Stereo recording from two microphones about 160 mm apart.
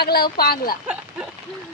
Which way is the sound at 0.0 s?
75° left (ahead or behind).